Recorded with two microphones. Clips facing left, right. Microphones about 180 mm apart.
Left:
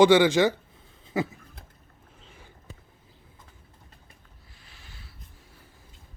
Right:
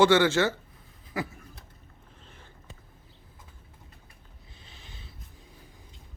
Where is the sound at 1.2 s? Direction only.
25° left (ahead or behind).